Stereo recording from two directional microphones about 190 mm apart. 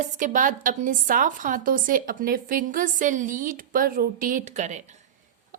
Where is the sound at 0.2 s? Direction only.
45° right (ahead or behind).